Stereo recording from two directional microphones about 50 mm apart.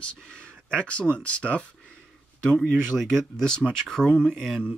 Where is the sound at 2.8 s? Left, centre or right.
Centre.